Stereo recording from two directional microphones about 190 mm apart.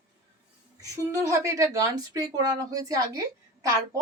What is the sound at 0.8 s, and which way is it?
A woman's voice, 15° right (ahead or behind).